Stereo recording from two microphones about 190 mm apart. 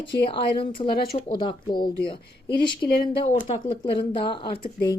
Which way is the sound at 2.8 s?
25° left (ahead or behind).